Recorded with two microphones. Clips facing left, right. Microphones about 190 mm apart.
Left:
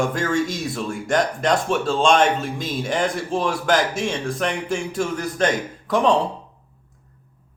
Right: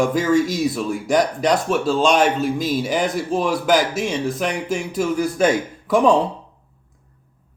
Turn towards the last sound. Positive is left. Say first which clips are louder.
# right 3 dB
turn(degrees=-5)  # may be behind; listen again after turning